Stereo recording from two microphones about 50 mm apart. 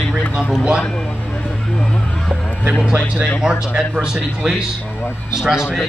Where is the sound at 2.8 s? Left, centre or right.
Centre.